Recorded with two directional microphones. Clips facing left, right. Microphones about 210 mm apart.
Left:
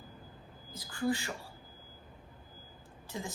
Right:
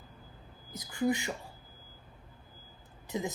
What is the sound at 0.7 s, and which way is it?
Speech, 20° right (ahead or behind).